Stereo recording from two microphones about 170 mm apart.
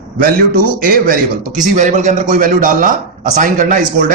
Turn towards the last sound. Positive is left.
turn(degrees=-50)  # may be behind; listen again after turning